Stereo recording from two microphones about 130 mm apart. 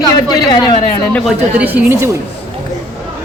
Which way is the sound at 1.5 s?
10° right (ahead or behind).